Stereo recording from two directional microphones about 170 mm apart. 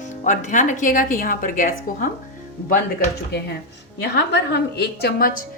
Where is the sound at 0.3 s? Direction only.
50° left (ahead or behind).